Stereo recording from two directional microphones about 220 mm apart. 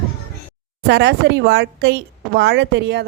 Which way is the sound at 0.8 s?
50° right (ahead or behind).